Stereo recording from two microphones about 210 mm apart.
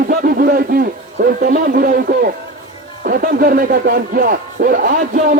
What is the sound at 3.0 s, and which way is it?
A man's voice, 40° right (ahead or behind).